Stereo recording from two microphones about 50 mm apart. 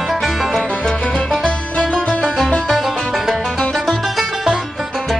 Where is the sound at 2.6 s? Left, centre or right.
Centre.